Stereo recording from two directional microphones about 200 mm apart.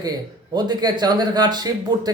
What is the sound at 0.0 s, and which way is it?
Speech, 20° right (ahead or behind).